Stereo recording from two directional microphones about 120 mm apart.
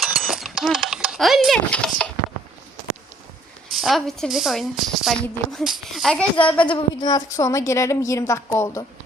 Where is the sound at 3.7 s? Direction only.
Centre (ahead or behind).